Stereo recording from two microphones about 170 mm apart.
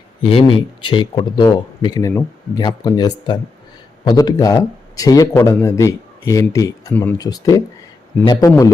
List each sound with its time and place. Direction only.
0.2 s a man's voice: 30° left (ahead or behind); by 7.2 s 10° left (ahead or behind)
7.2 s a man's voice: 20° left (ahead or behind)